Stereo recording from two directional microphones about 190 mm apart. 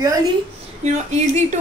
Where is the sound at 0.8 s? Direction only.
35° right (ahead or behind).